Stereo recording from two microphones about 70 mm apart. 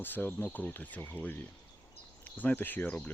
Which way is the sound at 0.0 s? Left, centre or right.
Left.